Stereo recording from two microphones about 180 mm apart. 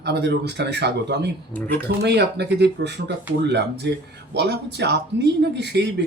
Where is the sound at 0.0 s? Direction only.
65° right (ahead or behind).